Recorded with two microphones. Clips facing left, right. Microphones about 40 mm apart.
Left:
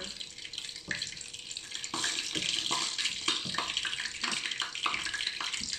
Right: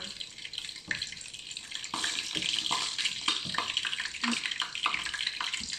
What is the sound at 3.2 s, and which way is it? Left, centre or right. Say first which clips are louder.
Bathtub: right 1 dB; centre.